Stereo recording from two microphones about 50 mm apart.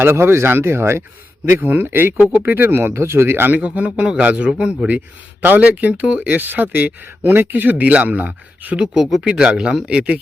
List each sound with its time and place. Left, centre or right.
0.0 s speech: right
1.5 s speech: right
3.6 s a man's voice: right